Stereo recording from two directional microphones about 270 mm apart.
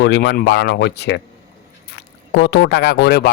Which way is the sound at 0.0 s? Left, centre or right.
Left.